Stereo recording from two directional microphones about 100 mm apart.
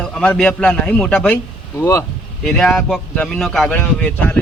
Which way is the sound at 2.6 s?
10° left (ahead or behind).